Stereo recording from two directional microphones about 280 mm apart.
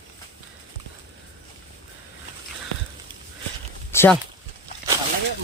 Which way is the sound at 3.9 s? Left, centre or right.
Centre.